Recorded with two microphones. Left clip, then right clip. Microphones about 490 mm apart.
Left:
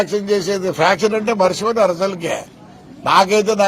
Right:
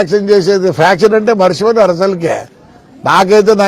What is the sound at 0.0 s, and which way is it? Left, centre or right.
A man's voice, right.